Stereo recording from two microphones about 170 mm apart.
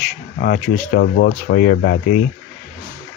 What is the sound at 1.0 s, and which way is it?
Speech, 70° left (ahead or behind).